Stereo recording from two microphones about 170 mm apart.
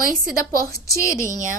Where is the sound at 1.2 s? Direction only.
50° right (ahead or behind).